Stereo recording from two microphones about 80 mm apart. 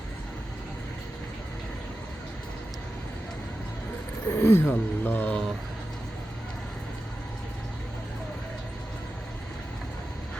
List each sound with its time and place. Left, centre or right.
4.3 s speech: left